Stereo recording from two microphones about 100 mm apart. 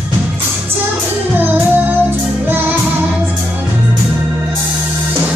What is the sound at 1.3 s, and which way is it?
Music, 20° right (ahead or behind).